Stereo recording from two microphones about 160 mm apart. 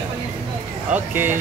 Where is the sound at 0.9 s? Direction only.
10° right (ahead or behind).